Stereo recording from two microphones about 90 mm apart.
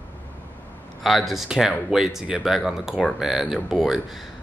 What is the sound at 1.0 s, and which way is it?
Speech, centre (ahead or behind).